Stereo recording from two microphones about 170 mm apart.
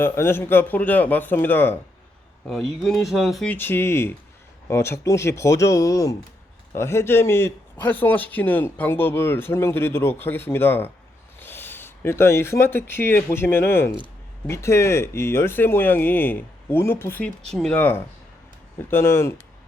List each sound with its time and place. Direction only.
0.0 s a man's voice: 15° left (ahead or behind)
2.5 s a man's voice: centre (ahead or behind)